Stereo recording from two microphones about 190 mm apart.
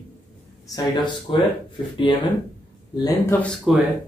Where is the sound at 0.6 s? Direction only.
20° left (ahead or behind).